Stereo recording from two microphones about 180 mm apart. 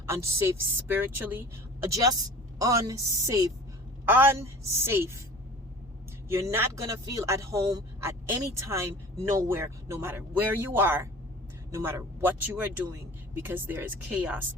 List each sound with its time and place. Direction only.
0.0 s speech: 15° right (ahead or behind)
6.2 s speech: 15° right (ahead or behind)